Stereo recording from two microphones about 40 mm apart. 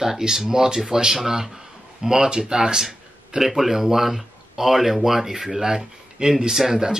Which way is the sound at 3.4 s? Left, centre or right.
Centre.